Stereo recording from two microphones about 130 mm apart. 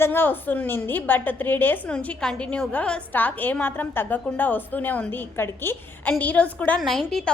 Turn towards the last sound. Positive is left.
turn(degrees=5)  # may be behind; listen again after turning